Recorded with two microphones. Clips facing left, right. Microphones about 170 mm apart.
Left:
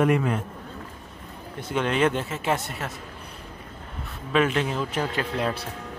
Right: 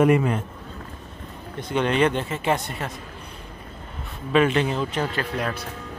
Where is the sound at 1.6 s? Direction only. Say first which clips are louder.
Right 2 dB; 5° left (ahead or behind).